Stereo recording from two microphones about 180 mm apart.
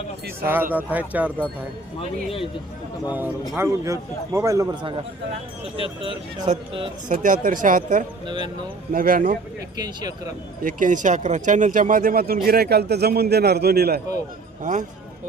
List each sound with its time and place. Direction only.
0.7 s a man's voice: 10° right (ahead or behind)
2.0 s speech: 30° left (ahead or behind)
3.1 s a man's voice: 10° right (ahead or behind); by 6.5 s 30° right (ahead or behind)
7.1 s speech: 45° right (ahead or behind)
8.3 s speech: 25° right (ahead or behind)
8.9 s speech: 50° right (ahead or behind)
9.7 s speech: 20° right (ahead or behind)
10.6 s speech: 50° right (ahead or behind)
14.6 s speech: 45° right (ahead or behind)